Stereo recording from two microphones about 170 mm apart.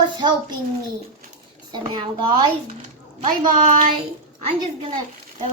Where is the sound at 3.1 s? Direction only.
50° right (ahead or behind).